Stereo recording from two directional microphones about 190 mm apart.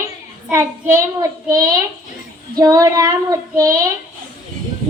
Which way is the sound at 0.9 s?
15° right (ahead or behind).